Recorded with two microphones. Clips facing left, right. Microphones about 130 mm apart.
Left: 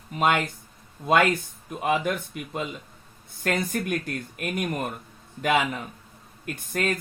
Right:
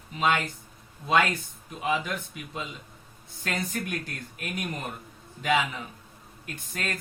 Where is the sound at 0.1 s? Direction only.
50° left (ahead or behind).